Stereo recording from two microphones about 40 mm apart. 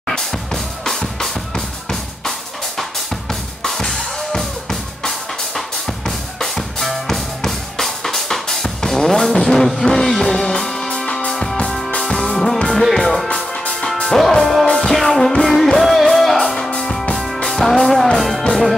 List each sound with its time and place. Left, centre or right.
0.8 s drum: centre
3.6 s drum kit: centre
6.0 s drum: centre
9.8 s music: centre
13.3 s music: left
14.0 s music: centre